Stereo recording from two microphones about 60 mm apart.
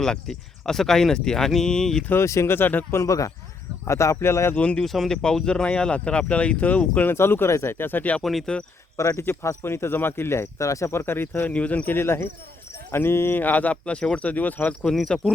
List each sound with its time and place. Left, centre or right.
0.0 s speech: centre
2.1 s speech: left
2.6 s speech: left
2.9 s speech: left
4.5 s speech: centre
4.9 s speech: centre; by 7.1 s left
7.1 s speech: left
8.2 s speech: centre
9.0 s speech: left
9.2 s speech: left
10.9 s speech: left
11.4 s speech: left
11.9 s speech: left
14.8 s speech: centre